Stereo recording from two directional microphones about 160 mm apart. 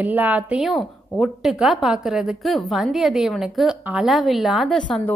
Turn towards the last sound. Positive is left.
turn(degrees=0)  # may be behind; listen again after turning